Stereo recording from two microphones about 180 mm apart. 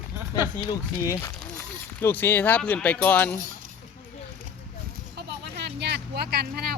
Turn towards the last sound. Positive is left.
turn(degrees=-55)  # may be behind; listen again after turning